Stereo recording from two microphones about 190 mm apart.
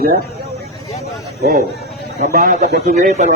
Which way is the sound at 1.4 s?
55° right (ahead or behind).